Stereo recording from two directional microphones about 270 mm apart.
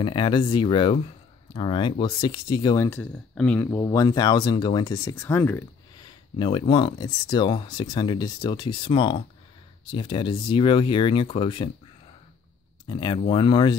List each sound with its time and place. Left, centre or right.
0.0 s speech: centre
12.8 s speech: centre